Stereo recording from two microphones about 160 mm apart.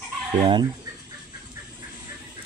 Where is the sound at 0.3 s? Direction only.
30° right (ahead or behind).